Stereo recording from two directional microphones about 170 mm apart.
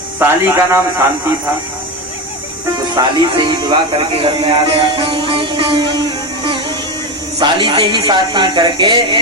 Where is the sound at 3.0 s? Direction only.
25° right (ahead or behind).